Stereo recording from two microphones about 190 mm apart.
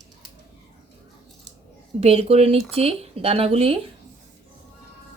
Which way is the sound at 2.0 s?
35° right (ahead or behind).